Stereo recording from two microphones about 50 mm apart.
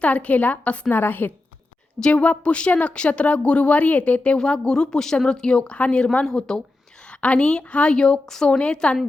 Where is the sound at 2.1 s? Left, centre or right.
Left.